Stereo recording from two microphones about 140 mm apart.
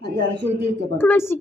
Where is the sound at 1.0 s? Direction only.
15° left (ahead or behind).